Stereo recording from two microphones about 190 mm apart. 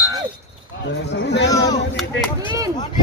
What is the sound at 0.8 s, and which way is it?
Speech, 65° left (ahead or behind).